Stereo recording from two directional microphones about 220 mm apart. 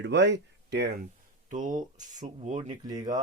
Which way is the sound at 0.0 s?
50° right (ahead or behind).